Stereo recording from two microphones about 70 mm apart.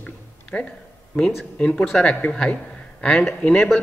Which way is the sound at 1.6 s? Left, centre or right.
Centre.